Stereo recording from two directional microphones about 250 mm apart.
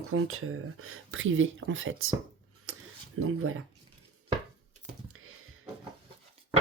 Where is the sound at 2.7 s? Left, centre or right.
Right.